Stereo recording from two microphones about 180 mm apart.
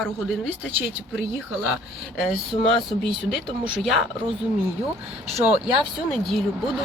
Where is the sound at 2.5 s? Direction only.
30° left (ahead or behind).